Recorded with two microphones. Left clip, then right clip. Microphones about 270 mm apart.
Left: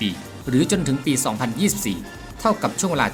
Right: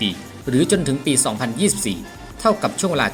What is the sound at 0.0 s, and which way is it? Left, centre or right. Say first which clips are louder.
Speech: right 3 dB; centre.